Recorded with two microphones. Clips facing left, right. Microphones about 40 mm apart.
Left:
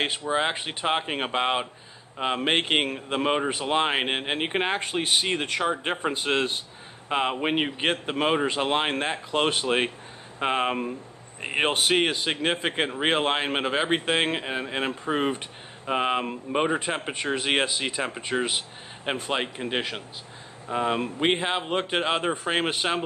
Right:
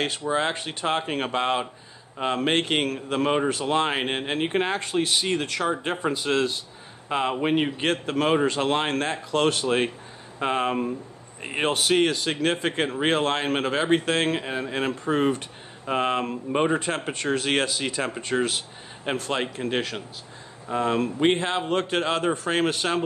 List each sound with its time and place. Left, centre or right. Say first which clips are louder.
0.3 s speech: right 1 dB; centre
6.1 s a man's voice: right 1 dB; left
7.1 s speech: right 1 dB; centre